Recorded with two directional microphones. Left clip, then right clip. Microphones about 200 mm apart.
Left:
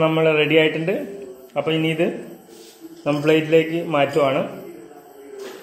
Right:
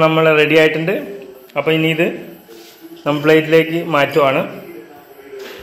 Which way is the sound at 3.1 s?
Centre (ahead or behind).